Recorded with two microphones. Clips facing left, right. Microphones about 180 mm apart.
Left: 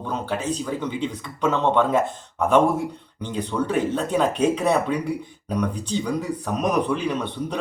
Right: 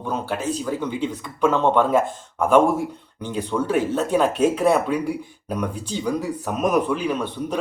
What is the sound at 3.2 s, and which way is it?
Speech, 10° right (ahead or behind).